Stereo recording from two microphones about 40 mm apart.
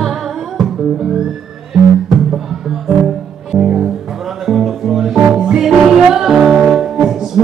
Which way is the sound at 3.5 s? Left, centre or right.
Centre.